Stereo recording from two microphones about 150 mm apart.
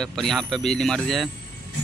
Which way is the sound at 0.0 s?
5° left (ahead or behind).